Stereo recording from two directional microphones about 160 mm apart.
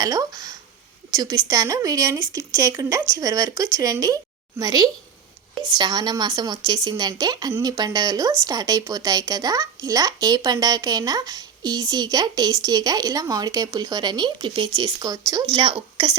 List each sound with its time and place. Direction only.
0.0 s speech: 25° right (ahead or behind)